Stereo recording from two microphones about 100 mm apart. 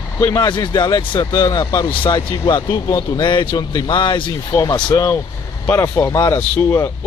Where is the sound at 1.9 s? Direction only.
60° left (ahead or behind); by 2.9 s 40° left (ahead or behind).